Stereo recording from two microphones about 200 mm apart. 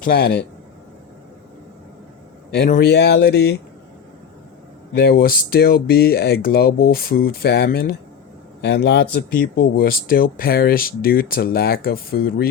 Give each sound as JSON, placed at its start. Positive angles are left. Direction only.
{"t": 0.0, "sound": "speech", "side_deg": 50}
{"t": 2.6, "sound": "speech", "side_deg": 50}
{"t": 4.9, "sound": "speech", "side_deg": 50}